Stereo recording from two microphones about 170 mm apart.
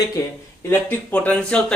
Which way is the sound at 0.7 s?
10° left (ahead or behind).